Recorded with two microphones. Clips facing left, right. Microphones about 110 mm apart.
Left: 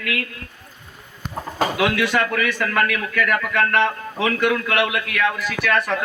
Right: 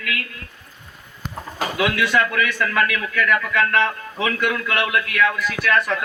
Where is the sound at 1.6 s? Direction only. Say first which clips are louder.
Left 2 dB; 30° left (ahead or behind).